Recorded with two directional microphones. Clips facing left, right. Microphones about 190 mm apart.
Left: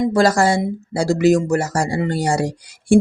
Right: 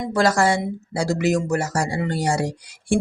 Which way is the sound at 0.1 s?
35° left (ahead or behind).